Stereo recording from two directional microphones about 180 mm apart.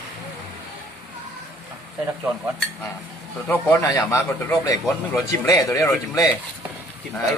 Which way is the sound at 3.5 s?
10° left (ahead or behind).